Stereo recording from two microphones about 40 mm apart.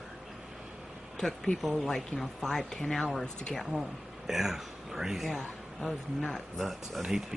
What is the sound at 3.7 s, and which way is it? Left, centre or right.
Speech, centre.